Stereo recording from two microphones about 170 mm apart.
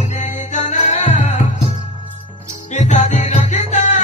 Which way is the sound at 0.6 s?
45° left (ahead or behind).